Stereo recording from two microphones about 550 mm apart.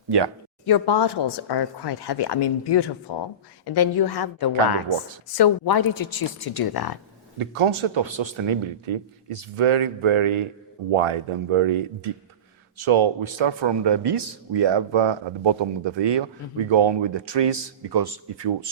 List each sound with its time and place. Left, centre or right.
0.6 s speech: left
7.3 s speech: right